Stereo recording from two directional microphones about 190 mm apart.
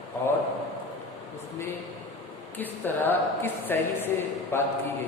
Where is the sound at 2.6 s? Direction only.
10° left (ahead or behind).